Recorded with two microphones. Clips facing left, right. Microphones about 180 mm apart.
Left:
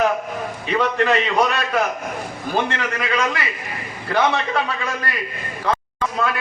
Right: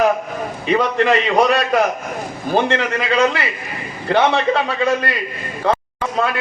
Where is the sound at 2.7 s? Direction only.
30° right (ahead or behind).